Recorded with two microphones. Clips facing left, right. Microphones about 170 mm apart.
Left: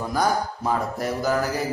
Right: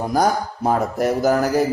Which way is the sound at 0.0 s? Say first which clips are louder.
Right 4 dB; 45° right (ahead or behind).